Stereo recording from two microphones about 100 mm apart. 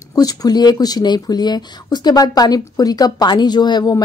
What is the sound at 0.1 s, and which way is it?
Speech, 40° left (ahead or behind).